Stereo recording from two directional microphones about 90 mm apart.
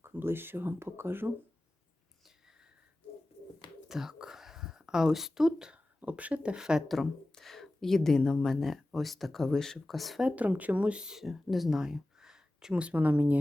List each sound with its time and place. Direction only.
0.0 s speech: 25° right (ahead or behind)
3.8 s speech: 5° right (ahead or behind)
10.2 s speech: 15° right (ahead or behind)